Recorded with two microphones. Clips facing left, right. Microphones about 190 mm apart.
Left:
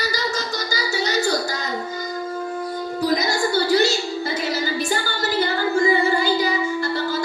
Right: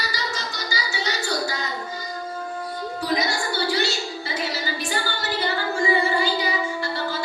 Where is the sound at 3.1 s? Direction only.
45° left (ahead or behind).